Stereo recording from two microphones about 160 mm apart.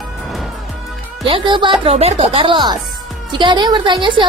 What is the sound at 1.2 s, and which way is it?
A woman's voice, 30° right (ahead or behind).